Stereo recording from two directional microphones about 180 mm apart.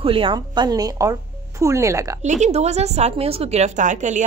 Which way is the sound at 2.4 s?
40° right (ahead or behind).